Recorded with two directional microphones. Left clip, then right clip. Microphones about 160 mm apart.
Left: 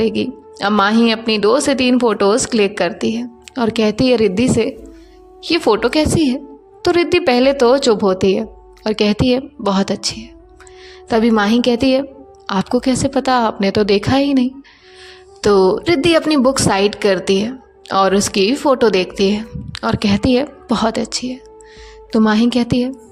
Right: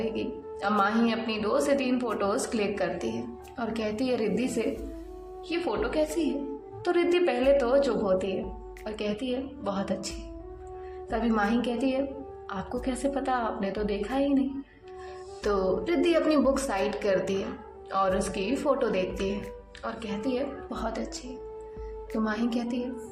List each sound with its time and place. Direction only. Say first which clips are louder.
0.0 s a woman's voice: left 13 dB; 45° left (ahead or behind)
5.5 s a woman's voice: left 15 dB; 50° left (ahead or behind)
11.1 s a woman's voice: left 13 dB; 45° left (ahead or behind)
19.7 s a woman's voice: left 17 dB; 55° left (ahead or behind)
22.2 s a woman's voice: left 15 dB; 45° left (ahead or behind)